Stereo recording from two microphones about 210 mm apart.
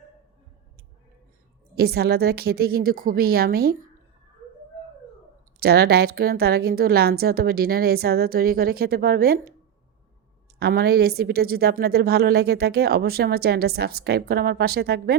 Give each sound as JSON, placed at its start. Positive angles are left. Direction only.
{"t": 1.7, "sound": "a woman's voice", "side_deg": -50}
{"t": 5.5, "sound": "a woman's voice", "side_deg": -50}
{"t": 10.6, "sound": "a woman's voice", "side_deg": -50}